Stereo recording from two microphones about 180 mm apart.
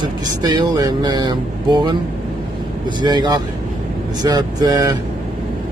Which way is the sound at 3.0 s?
25° right (ahead or behind).